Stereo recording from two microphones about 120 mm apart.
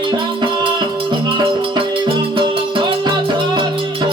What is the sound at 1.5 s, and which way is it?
Music, 45° right (ahead or behind).